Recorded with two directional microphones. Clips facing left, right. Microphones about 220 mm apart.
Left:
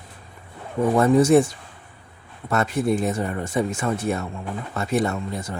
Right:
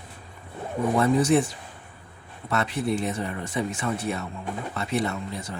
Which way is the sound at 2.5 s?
45° left (ahead or behind).